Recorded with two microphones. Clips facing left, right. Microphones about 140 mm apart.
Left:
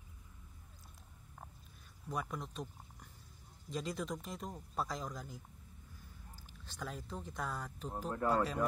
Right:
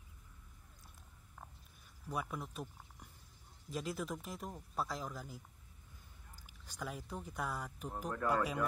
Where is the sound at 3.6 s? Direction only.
5° right (ahead or behind).